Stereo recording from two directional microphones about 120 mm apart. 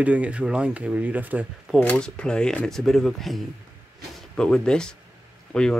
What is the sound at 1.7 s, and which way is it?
Speech, 10° left (ahead or behind).